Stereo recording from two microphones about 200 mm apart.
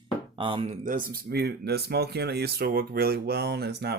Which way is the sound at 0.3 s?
25° right (ahead or behind).